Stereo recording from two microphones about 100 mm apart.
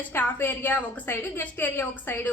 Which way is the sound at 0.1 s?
20° left (ahead or behind).